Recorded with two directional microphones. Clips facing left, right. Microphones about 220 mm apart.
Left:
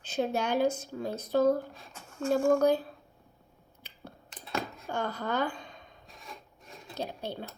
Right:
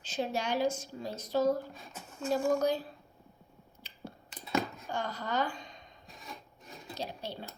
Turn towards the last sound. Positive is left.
turn(degrees=55)  # may be behind; listen again after turning